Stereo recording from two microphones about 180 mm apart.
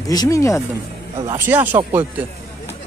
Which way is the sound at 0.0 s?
20° left (ahead or behind).